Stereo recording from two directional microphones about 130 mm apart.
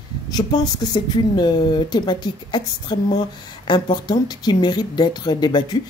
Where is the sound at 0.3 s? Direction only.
30° left (ahead or behind).